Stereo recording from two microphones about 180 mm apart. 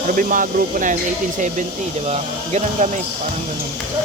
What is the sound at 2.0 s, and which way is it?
Speech, 40° right (ahead or behind).